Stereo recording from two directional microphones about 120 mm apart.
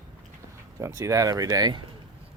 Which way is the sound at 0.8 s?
25° right (ahead or behind).